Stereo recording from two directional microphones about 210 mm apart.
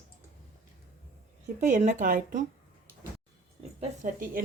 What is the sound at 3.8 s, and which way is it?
Speech, 40° right (ahead or behind).